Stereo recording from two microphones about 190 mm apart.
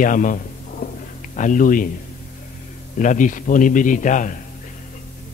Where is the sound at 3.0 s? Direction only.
40° left (ahead or behind).